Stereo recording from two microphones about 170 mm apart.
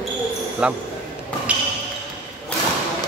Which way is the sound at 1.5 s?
10° right (ahead or behind).